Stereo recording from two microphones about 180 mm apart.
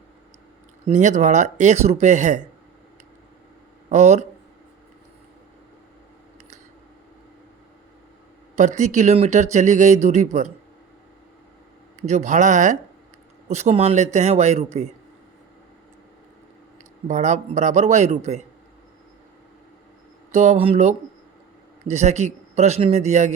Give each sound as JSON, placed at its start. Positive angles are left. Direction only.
{"t": 0.9, "sound": "speech", "side_deg": -40}
{"t": 3.8, "sound": "speech", "side_deg": -40}
{"t": 8.5, "sound": "speech", "side_deg": -40}
{"t": 11.9, "sound": "speech", "side_deg": -40}
{"t": 17.1, "sound": "speech", "side_deg": -40}
{"t": 20.3, "sound": "speech", "side_deg": -40}